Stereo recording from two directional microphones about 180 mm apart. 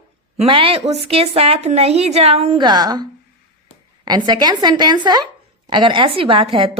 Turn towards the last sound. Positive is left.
turn(degrees=-30)  # may be behind; listen again after turning